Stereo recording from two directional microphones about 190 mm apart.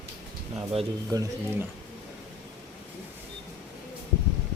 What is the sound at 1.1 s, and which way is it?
Speech, 20° right (ahead or behind).